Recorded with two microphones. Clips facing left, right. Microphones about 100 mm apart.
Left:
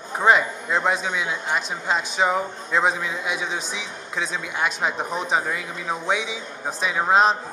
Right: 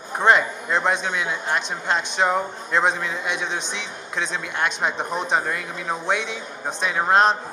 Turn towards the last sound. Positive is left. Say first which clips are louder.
# even
turn(degrees=0)  # may be behind; listen again after turning